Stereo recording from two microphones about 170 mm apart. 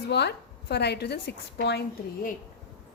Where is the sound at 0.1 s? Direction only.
85° left.